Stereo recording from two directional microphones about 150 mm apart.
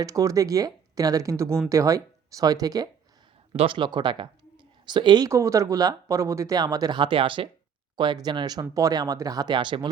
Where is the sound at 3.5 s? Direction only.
35° right (ahead or behind).